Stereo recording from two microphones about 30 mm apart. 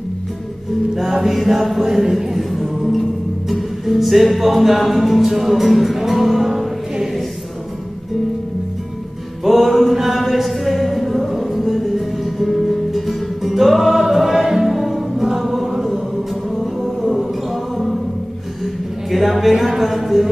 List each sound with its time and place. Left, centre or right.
1.1 s music: centre
1.9 s speech: centre
3.4 s music: centre
9.4 s a sound: centre
10.3 s music: centre
15.4 s chant: centre
16.5 s music: centre
19.0 s a woman's voice: centre